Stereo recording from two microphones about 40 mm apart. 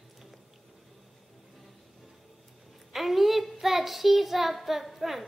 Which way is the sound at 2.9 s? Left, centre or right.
Centre.